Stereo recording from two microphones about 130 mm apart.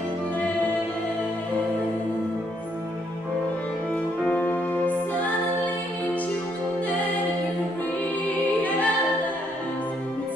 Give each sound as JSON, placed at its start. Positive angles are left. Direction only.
{"t": 3.9, "sound": "music", "side_deg": 10}
{"t": 8.3, "sound": "choir", "side_deg": 10}